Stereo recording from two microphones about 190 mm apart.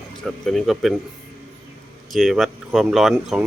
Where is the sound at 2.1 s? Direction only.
Centre (ahead or behind).